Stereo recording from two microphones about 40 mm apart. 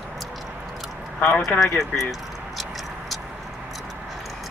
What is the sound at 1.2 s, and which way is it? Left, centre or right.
Speech, left.